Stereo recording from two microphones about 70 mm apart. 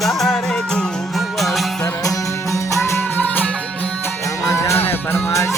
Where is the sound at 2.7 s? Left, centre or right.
Left.